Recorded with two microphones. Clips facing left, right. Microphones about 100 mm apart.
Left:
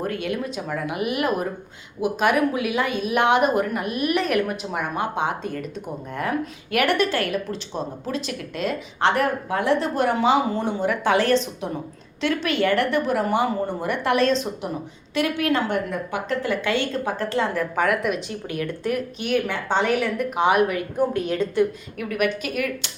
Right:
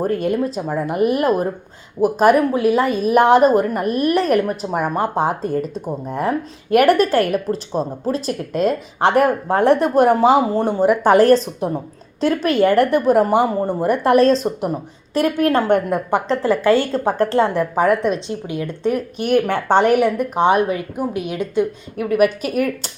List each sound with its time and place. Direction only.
0.0 s a woman's voice: 40° right (ahead or behind)
16.3 s a woman's voice: 35° right (ahead or behind)
18.4 s a woman's voice: 20° right (ahead or behind)
19.5 s speech: 55° right (ahead or behind)
20.3 s a woman's voice: 30° right (ahead or behind)
21.0 s a woman's voice: 15° right (ahead or behind)
21.9 s a woman's voice: 35° right (ahead or behind)